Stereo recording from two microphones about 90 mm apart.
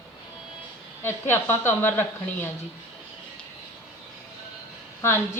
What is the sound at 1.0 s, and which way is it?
A woman's voice, 25° left (ahead or behind).